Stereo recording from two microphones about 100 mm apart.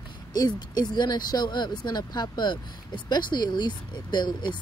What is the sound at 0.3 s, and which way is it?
Speech, 40° left (ahead or behind).